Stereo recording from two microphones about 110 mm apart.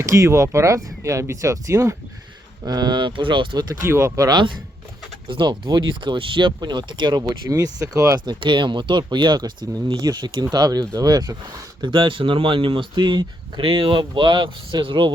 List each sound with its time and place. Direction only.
0.1 s speech: 30° right (ahead or behind)
2.6 s speech: 40° right (ahead or behind)
3.8 s speech: 25° right (ahead or behind)
5.3 s speech: 50° right (ahead or behind); by 8.2 s 30° right (ahead or behind)
8.3 s speech: 50° right (ahead or behind)
11.8 s speech: 45° right (ahead or behind)